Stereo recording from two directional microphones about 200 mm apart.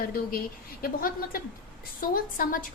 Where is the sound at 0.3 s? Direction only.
45° left (ahead or behind).